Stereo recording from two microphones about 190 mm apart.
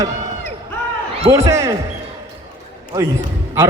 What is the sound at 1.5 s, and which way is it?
Speech, 15° right (ahead or behind).